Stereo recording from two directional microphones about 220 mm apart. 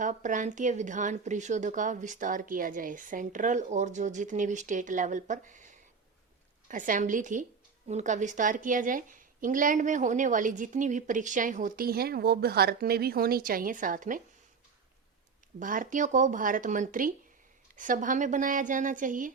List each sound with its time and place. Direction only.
0.0 s a woman's voice: 35° right (ahead or behind)
15.5 s a woman's voice: 35° right (ahead or behind)